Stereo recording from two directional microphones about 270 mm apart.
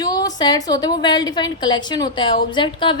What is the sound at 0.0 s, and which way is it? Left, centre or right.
A woman's voice, centre.